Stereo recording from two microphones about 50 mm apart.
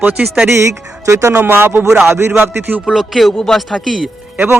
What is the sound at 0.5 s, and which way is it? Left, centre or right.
Speech, right.